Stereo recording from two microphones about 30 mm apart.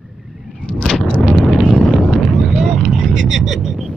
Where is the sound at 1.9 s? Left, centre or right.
Centre.